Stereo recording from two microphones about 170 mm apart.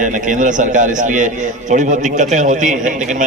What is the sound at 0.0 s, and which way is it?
A man's voice, 50° right (ahead or behind).